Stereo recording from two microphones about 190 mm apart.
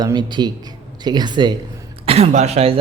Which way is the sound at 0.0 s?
20° right (ahead or behind).